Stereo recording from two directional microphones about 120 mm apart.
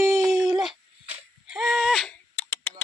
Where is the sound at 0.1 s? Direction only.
5° right (ahead or behind).